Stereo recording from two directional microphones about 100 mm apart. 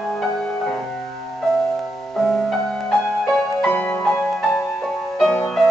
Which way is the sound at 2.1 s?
5° left (ahead or behind).